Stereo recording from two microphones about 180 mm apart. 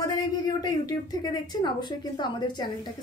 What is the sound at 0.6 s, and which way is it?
A woman's voice, 20° left (ahead or behind).